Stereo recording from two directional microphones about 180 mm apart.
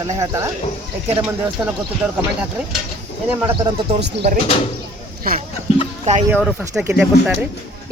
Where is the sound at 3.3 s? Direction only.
10° right (ahead or behind).